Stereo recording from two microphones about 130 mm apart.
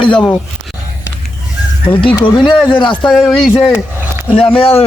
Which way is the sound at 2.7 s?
40° left (ahead or behind).